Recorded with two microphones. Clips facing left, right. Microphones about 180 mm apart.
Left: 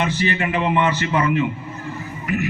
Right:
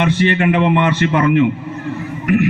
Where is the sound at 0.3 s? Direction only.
60° right (ahead or behind).